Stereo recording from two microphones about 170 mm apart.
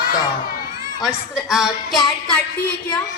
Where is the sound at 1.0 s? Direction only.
5° right (ahead or behind).